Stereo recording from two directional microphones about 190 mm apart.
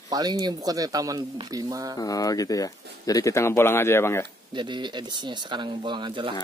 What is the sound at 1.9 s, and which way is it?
Speech, 20° left (ahead or behind).